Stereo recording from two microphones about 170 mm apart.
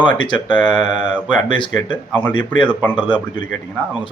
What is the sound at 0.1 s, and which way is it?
Speech, 30° left (ahead or behind).